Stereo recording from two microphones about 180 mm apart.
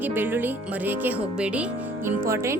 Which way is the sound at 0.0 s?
10° right (ahead or behind).